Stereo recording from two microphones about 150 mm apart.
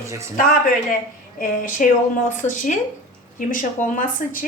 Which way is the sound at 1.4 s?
60° left (ahead or behind).